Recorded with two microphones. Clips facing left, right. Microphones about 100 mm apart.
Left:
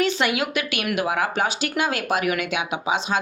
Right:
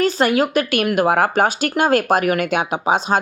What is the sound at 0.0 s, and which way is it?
Speech, 40° right (ahead or behind).